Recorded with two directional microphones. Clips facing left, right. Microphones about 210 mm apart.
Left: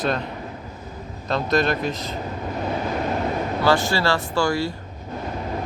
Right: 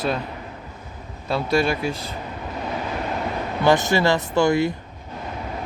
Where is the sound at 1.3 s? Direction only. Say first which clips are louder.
Even; 10° right (ahead or behind).